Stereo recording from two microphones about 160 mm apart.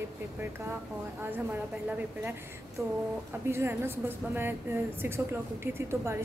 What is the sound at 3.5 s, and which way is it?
A woman's voice, 15° right (ahead or behind).